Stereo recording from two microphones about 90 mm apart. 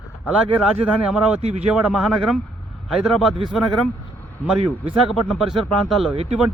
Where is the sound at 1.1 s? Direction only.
10° right (ahead or behind).